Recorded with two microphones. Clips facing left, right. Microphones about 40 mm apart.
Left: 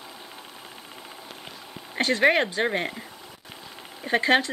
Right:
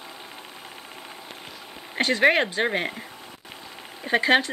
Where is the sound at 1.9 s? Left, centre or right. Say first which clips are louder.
Right 1 dB; centre.